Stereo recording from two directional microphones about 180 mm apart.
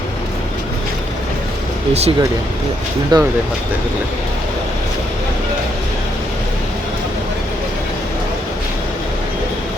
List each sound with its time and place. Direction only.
1.9 s speech: 35° right (ahead or behind)
3.1 s speech: 25° right (ahead or behind)